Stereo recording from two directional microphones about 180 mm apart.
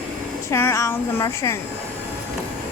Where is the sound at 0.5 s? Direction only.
15° left (ahead or behind).